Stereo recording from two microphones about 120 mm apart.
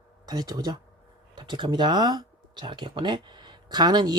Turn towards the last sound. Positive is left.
turn(degrees=-35)  # may be behind; listen again after turning